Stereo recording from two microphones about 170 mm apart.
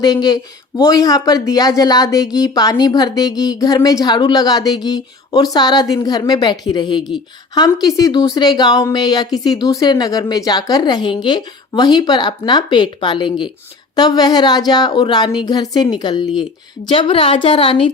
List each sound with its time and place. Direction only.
0.0 s a woman's voice: 25° left (ahead or behind)